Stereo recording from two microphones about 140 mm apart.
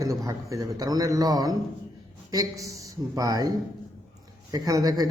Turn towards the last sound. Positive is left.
turn(degrees=-25)  # may be behind; listen again after turning